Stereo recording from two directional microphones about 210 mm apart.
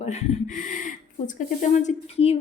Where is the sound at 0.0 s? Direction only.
35° left (ahead or behind).